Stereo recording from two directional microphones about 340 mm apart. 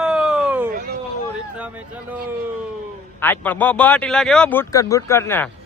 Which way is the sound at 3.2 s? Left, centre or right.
Centre.